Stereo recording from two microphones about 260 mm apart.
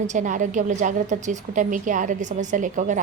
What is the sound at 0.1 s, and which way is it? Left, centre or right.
A woman's voice, right.